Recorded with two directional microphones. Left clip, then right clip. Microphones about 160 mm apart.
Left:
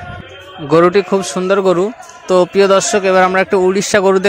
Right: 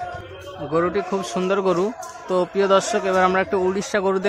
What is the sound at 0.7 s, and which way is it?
Speech, 40° left (ahead or behind).